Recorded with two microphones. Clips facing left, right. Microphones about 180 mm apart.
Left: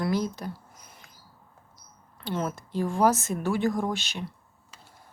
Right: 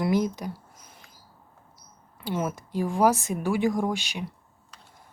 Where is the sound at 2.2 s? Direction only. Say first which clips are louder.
Right 1 dB; 10° right (ahead or behind).